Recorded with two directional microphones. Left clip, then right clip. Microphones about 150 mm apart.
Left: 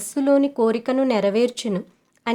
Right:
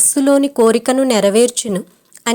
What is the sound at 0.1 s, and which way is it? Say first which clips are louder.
A woman's voice: right 3 dB; 35° right (ahead or behind).